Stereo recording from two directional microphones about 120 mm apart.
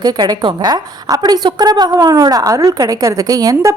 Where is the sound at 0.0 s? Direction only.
35° right (ahead or behind).